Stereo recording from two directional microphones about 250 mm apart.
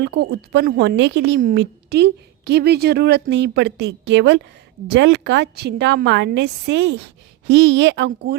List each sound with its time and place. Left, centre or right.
0.0 s a woman's voice: right